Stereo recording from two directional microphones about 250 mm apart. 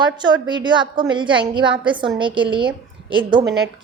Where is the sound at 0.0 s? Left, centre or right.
Centre.